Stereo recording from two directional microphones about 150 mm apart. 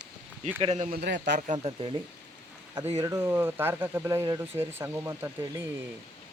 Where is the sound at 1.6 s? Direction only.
40° right (ahead or behind).